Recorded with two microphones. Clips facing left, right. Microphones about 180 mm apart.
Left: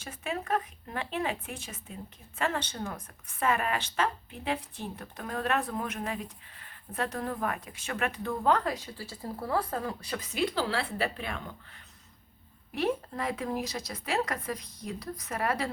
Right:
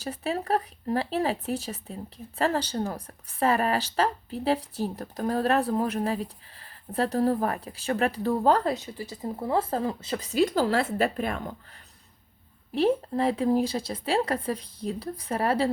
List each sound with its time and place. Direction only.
0.0 s speech: 35° right (ahead or behind)
10.3 s a woman's voice: 45° right (ahead or behind)
12.7 s speech: 30° right (ahead or behind)